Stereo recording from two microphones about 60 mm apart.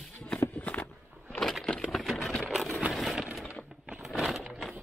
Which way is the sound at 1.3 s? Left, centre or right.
Centre.